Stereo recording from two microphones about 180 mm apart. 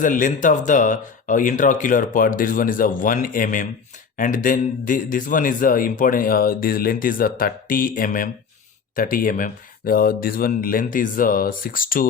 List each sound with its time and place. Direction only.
0.0 s speech: 45° left (ahead or behind)